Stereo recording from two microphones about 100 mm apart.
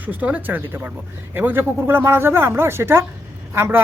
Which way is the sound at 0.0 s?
15° right (ahead or behind).